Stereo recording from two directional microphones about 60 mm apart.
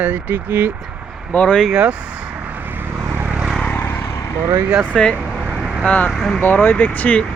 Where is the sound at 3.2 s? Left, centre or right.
Right.